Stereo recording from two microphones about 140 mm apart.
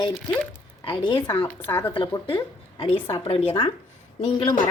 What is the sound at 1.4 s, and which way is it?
Speech, 15° left (ahead or behind).